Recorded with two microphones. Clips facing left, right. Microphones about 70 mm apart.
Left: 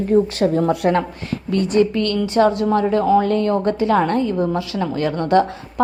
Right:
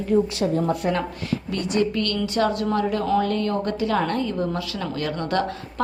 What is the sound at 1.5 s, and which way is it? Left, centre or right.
A woman's voice, left.